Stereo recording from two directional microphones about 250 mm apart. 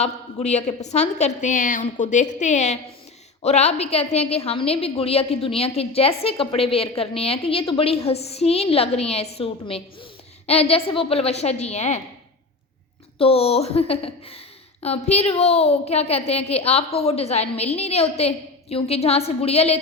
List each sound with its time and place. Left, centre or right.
0.0 s a woman's voice: left
13.1 s a woman's voice: left